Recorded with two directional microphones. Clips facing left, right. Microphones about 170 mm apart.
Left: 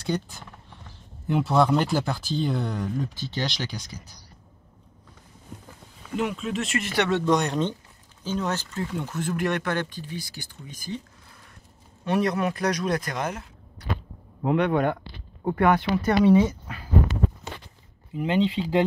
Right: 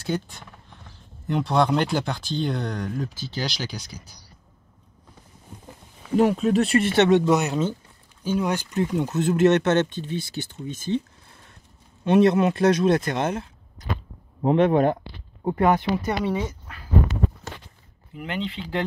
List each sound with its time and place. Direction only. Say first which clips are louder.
0.0 s speech: right 1 dB; centre (ahead or behind)
6.1 s speech: right 9 dB; 40° right (ahead or behind); by 7.3 s 15° right (ahead or behind)
7.3 s speech: right 1 dB; 5° right (ahead or behind); by 11.0 s 25° right (ahead or behind)
12.0 s speech: right 7 dB; 25° right (ahead or behind)
18.1 s speech: left 7 dB; 30° left (ahead or behind)